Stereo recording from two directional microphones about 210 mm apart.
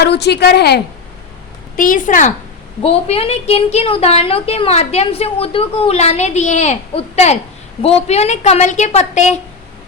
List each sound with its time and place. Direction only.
0.0 s a woman's voice: 55° left (ahead or behind)
1.7 s a woman's voice: 40° left (ahead or behind)